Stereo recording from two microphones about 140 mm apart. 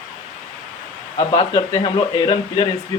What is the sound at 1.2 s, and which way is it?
Speech, 35° left (ahead or behind).